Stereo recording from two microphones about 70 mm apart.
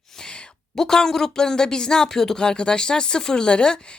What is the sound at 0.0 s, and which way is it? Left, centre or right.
A woman's voice, centre.